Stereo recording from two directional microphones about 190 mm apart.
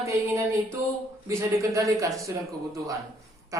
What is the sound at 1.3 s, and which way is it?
Speech, 15° right (ahead or behind).